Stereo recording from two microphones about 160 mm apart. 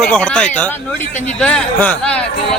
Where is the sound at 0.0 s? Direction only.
5° left (ahead or behind).